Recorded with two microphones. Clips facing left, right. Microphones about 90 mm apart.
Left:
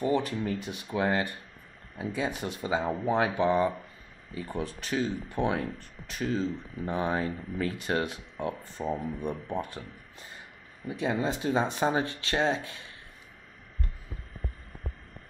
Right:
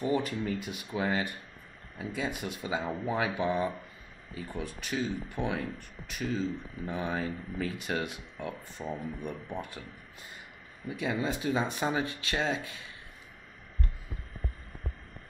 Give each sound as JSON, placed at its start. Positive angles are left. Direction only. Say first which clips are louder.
{"t": 0.0, "sound": "speech", "louder": "left 2 dB", "side_deg": 30}
{"t": 0.9, "sound": "speech", "louder": "left 3 dB", "side_deg": 40}
{"t": 7.8, "sound": "speech", "louder": "left 4 dB", "side_deg": 35}